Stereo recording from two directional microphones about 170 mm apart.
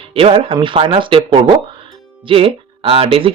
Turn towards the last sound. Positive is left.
turn(degrees=-35)  # may be behind; listen again after turning